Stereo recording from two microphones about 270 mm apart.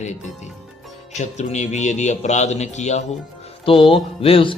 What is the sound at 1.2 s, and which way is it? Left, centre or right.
Speech, left.